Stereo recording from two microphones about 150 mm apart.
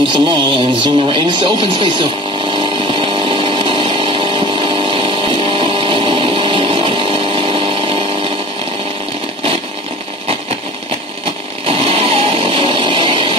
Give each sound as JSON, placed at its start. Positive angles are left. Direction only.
{"t": 0.0, "sound": "speech", "side_deg": -35}
{"t": 2.5, "sound": "chainsaw", "side_deg": -35}
{"t": 11.6, "sound": "vehicle", "side_deg": -40}